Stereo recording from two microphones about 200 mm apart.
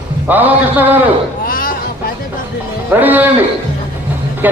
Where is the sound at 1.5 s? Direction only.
45° left (ahead or behind).